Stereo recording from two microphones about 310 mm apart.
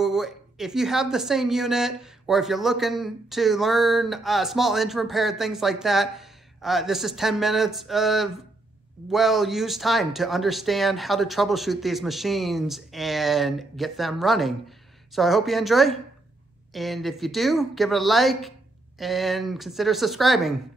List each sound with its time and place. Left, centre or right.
0.0 s a woman's voice: centre